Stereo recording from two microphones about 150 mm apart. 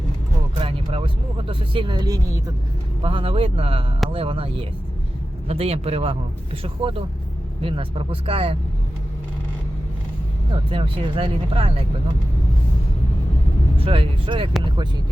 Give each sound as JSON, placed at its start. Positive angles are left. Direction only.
{"t": 0.9, "sound": "speech", "side_deg": -35}
{"t": 3.0, "sound": "speech", "side_deg": -35}
{"t": 10.5, "sound": "speech", "side_deg": -35}
{"t": 13.7, "sound": "speech", "side_deg": -40}